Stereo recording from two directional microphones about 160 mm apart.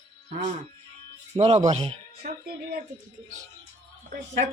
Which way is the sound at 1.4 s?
40° right (ahead or behind).